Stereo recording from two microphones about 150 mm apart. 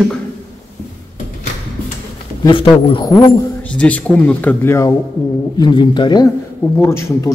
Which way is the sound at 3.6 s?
10° left (ahead or behind).